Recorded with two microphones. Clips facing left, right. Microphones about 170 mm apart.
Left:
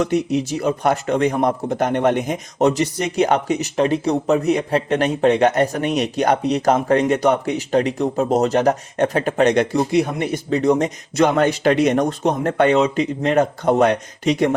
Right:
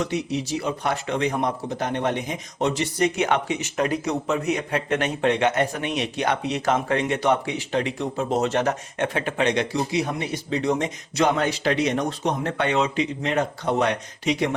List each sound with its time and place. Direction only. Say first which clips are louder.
0.0 s speech: left 7 dB; 50° left (ahead or behind)